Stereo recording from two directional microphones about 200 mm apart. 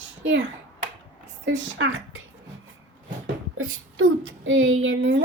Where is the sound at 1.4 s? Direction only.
70° right (ahead or behind).